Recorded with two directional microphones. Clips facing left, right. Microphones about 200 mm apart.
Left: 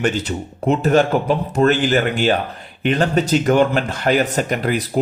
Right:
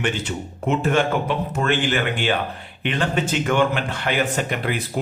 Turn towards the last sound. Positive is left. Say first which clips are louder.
# left 5 dB
turn(degrees=40)  # may be behind; listen again after turning